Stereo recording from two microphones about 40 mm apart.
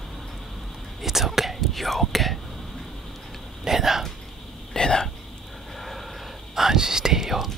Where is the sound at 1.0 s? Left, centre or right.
Centre.